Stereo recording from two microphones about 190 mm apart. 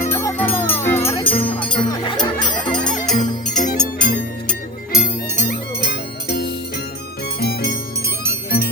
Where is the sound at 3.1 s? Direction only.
40° left (ahead or behind).